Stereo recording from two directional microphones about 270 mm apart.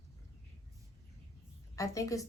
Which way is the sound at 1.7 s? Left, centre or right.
Centre.